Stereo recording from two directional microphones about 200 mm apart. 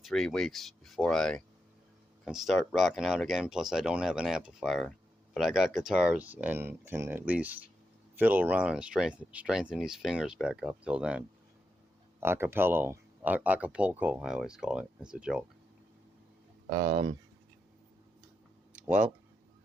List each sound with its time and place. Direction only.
0.0 s speech: centre (ahead or behind)
12.2 s speech: 10° right (ahead or behind)
16.6 s speech: 40° right (ahead or behind)
18.7 s a sound: 5° right (ahead or behind)